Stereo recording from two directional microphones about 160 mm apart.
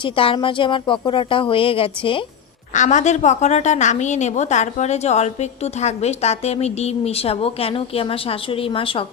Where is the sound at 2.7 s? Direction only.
50° left (ahead or behind).